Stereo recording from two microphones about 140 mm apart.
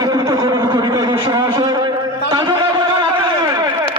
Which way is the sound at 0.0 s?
30° right (ahead or behind).